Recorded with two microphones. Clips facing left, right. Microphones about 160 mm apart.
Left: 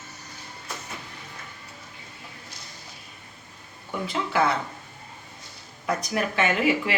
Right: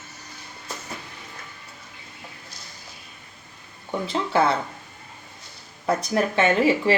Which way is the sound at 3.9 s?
30° right (ahead or behind).